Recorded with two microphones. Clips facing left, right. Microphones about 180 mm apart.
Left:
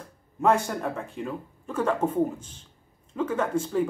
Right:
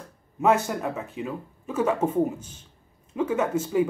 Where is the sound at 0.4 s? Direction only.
5° right (ahead or behind).